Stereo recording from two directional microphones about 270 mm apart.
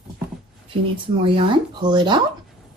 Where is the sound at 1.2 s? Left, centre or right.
Centre.